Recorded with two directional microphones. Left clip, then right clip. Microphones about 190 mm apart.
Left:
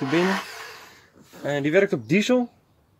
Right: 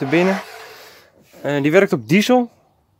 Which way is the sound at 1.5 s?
55° right (ahead or behind).